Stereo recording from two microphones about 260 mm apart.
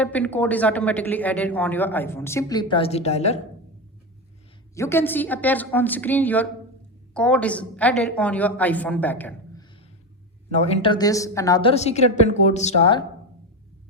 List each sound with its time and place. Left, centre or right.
0.0 s speech: centre; by 3.3 s left
4.7 s a woman's voice: centre
10.5 s a woman's voice: left